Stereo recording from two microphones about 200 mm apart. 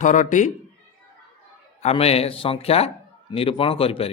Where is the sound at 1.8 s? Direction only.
30° left (ahead or behind).